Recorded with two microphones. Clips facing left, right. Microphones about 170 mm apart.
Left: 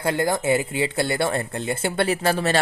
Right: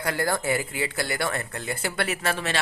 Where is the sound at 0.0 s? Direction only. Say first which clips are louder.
Left 4 dB; 25° left (ahead or behind).